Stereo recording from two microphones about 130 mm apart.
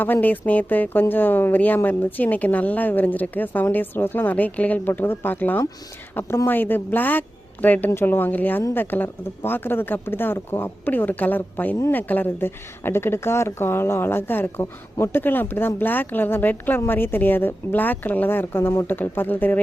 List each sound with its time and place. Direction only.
0.0 s a woman's voice: 15° left (ahead or behind)